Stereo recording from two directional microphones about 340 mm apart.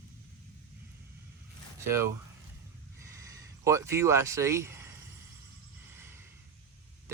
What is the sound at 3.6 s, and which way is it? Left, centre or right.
Speech, centre.